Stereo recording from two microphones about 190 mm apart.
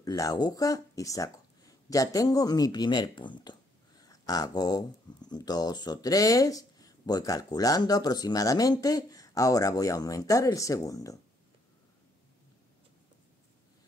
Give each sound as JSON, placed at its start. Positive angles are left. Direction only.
{"t": 0.0, "sound": "speech", "side_deg": 20}